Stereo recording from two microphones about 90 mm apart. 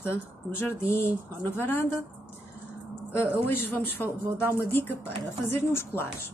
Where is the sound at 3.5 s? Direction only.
25° left (ahead or behind).